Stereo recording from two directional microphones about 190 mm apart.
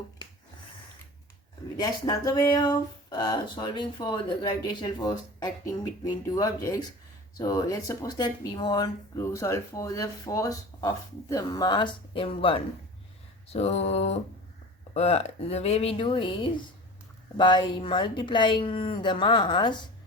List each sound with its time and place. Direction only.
1.7 s speech: 20° left (ahead or behind)